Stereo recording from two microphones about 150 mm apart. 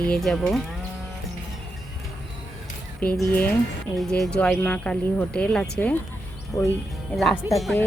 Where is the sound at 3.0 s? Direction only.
10° left (ahead or behind).